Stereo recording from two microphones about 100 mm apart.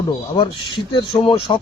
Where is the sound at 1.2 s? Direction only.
65° left (ahead or behind).